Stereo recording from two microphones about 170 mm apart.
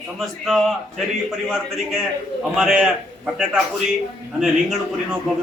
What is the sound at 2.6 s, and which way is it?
Speech, 5° right (ahead or behind).